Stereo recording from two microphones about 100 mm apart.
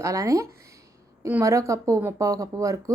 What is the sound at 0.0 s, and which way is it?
Speech, 35° right (ahead or behind).